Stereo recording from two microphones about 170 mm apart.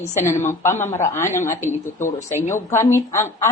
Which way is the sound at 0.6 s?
15° left (ahead or behind).